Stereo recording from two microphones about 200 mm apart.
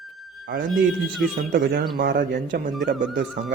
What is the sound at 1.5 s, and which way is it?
Speech, 50° right (ahead or behind).